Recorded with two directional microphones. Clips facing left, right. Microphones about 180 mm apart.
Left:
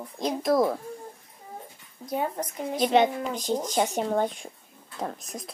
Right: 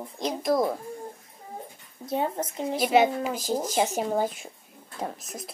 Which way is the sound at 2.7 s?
5° right (ahead or behind).